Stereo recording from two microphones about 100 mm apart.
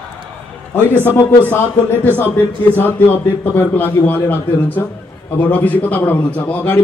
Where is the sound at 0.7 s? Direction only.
20° left (ahead or behind).